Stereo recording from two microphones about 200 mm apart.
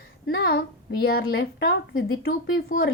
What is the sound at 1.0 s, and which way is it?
Speech, 50° left (ahead or behind).